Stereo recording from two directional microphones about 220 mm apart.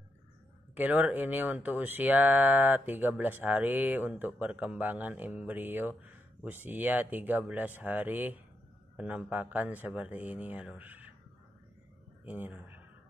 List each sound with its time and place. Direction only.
0.7 s speech: 10° right (ahead or behind)
12.3 s a man's voice: 5° right (ahead or behind)